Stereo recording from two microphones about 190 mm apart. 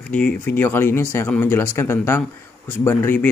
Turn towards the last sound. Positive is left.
turn(degrees=10)  # may be behind; listen again after turning